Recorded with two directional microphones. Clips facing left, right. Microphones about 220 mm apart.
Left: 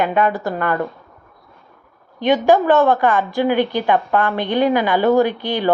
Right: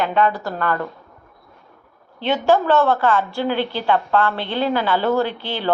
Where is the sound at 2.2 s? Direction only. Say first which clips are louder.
Left 3 dB; 15° left (ahead or behind).